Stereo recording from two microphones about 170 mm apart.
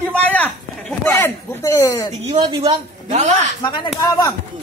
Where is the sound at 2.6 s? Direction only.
40° right (ahead or behind).